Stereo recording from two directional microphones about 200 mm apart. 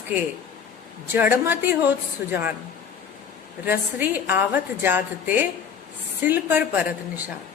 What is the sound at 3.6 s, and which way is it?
A woman's voice, 10° right (ahead or behind).